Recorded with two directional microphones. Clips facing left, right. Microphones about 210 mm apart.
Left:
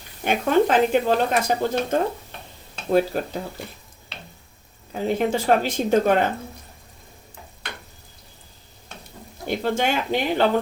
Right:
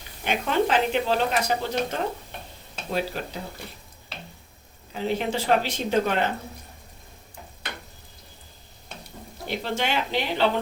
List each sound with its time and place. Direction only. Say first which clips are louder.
0.3 s speech: left 5 dB; 50° left (ahead or behind)
4.9 s speech: left 4 dB; 50° left (ahead or behind)
9.5 s speech: left 5 dB; 50° left (ahead or behind)